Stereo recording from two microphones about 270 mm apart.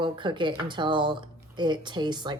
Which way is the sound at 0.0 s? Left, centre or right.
Centre.